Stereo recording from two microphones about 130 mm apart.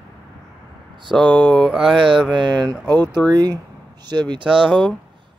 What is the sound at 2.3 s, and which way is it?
Speech, 35° right (ahead or behind).